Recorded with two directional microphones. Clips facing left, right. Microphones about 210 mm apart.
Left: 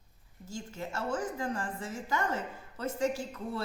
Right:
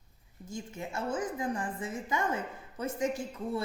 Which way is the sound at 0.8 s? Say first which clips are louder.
Even; 20° right (ahead or behind).